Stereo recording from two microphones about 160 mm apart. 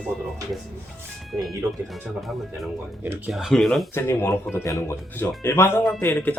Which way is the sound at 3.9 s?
15° left (ahead or behind).